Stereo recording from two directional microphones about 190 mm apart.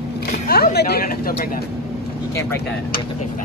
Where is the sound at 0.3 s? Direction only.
55° left (ahead or behind).